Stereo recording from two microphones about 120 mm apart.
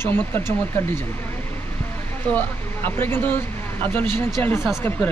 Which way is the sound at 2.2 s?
15° left (ahead or behind).